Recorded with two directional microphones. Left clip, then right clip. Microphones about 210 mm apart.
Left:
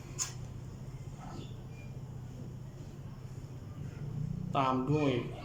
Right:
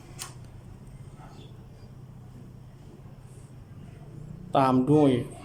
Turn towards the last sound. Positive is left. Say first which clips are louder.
# right 9 dB
turn(degrees=-25)  # may be behind; listen again after turning